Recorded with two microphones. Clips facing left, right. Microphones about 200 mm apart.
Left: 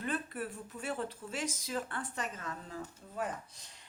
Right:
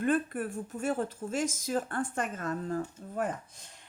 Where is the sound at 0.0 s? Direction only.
50° right (ahead or behind).